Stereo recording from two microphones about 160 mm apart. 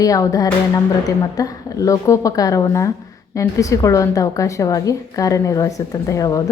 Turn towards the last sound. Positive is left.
turn(degrees=20)  # may be behind; listen again after turning